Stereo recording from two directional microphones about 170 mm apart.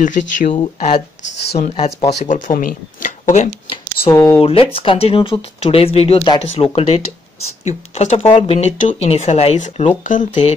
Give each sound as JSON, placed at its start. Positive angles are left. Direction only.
{"t": 0.0, "sound": "speech", "side_deg": 45}
{"t": 2.1, "sound": "speech", "side_deg": 50}
{"t": 4.1, "sound": "speech", "side_deg": 20}
{"t": 4.4, "sound": "speech", "side_deg": 35}